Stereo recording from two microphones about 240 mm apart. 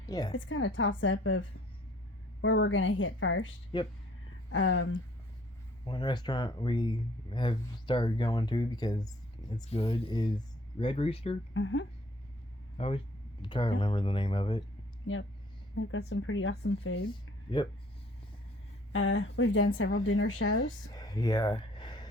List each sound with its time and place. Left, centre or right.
0.0 s a woman's voice: centre
0.3 s a woman's voice: left
3.7 s speech: centre
4.5 s speech: left
5.8 s speech: centre
11.5 s a woman's voice: left
12.7 s speech: left
15.0 s speech: left
18.9 s speech: left
21.1 s a sound: centre